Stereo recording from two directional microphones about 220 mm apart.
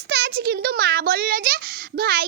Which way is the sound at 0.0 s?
50° right (ahead or behind).